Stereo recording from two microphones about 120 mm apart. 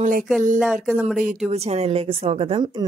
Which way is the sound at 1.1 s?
90° right.